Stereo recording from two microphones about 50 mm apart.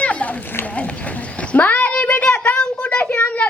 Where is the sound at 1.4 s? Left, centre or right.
Left.